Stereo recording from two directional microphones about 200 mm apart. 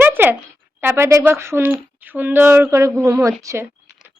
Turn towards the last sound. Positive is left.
turn(degrees=-15)  # may be behind; listen again after turning